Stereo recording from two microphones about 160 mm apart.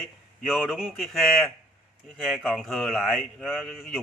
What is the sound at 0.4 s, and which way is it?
Speech, centre (ahead or behind).